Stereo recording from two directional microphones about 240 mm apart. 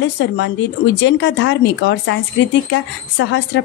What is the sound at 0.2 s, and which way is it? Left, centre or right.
A woman's voice, left.